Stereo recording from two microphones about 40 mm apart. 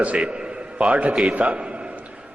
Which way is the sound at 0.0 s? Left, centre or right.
Right.